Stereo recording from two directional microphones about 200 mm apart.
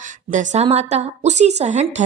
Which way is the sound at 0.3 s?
35° right (ahead or behind).